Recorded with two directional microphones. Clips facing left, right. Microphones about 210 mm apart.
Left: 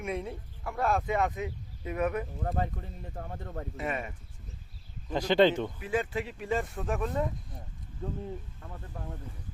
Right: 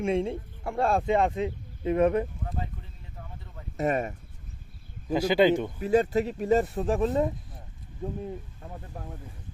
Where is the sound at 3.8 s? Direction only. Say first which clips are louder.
Right 9 dB; 40° right (ahead or behind).